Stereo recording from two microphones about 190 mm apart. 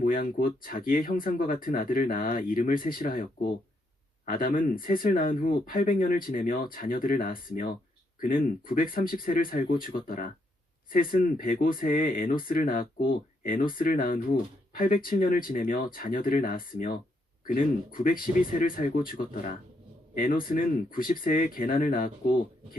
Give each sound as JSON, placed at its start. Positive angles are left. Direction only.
{"t": 0.0, "sound": "speech", "side_deg": 45}